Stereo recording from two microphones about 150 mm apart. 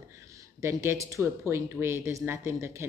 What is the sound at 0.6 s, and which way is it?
Speech, 20° right (ahead or behind).